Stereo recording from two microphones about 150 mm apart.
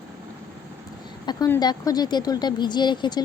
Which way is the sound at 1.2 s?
30° left (ahead or behind).